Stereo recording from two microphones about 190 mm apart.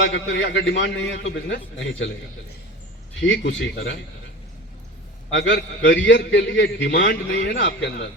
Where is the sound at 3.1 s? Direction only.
70° left (ahead or behind).